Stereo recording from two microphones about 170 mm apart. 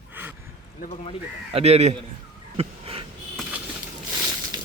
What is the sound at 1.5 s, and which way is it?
Speech, 40° right (ahead or behind).